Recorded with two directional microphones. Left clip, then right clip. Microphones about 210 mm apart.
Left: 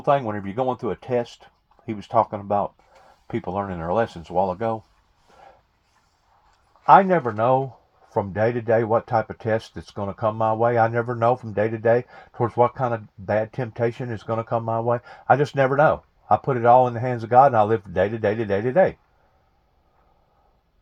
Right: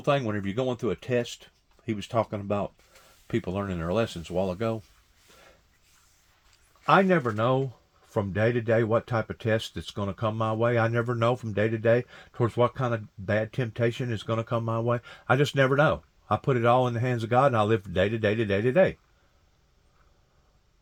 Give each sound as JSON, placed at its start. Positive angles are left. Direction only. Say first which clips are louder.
{"t": 0.2, "sound": "speech", "louder": "left 4 dB", "side_deg": -35}
{"t": 2.1, "sound": "speech", "louder": "left 8 dB", "side_deg": -50}
{"t": 3.2, "sound": "speech", "louder": "left 4 dB", "side_deg": -35}
{"t": 6.8, "sound": "speech", "louder": "left 7 dB", "side_deg": -30}